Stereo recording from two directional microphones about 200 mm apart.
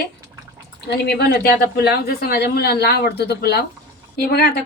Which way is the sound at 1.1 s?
50° left (ahead or behind).